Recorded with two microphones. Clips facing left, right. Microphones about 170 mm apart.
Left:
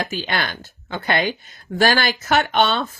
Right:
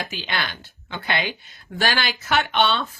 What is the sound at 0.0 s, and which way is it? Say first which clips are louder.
Speech: left 5 dB; 45° left (ahead or behind).